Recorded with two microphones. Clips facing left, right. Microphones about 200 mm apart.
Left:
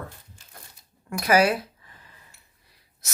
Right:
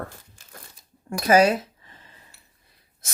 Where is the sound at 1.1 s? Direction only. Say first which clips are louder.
Right 3 dB; 25° right (ahead or behind).